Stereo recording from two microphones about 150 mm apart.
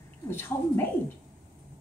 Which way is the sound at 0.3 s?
15° left (ahead or behind).